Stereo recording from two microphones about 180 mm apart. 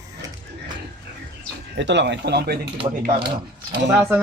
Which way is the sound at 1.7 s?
80° right.